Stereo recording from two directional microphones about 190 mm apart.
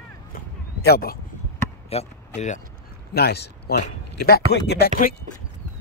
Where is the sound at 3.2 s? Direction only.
60° left (ahead or behind).